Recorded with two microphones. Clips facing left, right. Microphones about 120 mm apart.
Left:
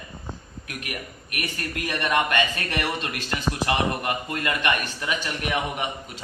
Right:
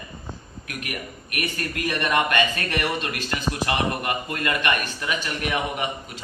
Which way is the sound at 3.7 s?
20° left (ahead or behind).